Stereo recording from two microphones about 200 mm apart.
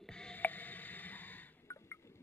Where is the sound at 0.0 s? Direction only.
5° left (ahead or behind).